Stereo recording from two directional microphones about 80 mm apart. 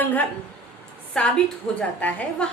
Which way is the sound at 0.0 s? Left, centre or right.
Left.